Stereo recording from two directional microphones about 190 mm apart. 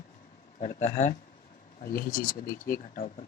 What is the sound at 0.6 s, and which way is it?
Speech, 35° left (ahead or behind).